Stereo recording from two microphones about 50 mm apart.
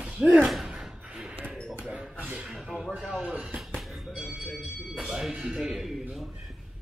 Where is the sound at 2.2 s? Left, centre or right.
Right.